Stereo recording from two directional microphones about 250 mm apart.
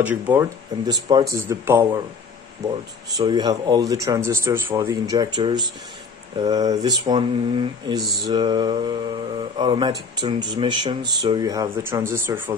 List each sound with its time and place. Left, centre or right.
0.0 s speech: centre